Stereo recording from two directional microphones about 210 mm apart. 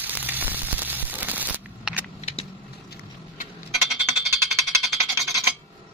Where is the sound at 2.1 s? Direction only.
30° left (ahead or behind).